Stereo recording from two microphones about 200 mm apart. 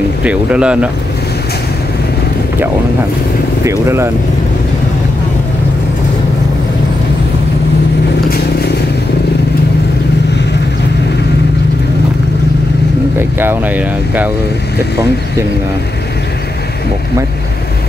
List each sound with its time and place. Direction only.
0.2 s speech: 5° right (ahead or behind)
3.6 s speech: 15° right (ahead or behind)
8.3 s vehicle: 55° left (ahead or behind)
13.2 s speech: 10° right (ahead or behind)